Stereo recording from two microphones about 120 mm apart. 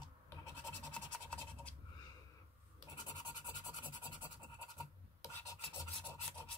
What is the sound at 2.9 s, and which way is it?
Scratch, 35° left (ahead or behind).